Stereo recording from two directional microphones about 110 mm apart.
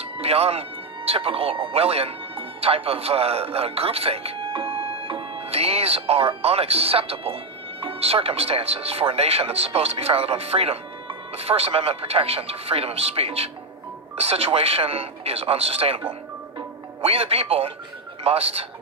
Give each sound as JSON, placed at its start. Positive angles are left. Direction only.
{"t": 0.0, "sound": "a man's voice", "side_deg": -65}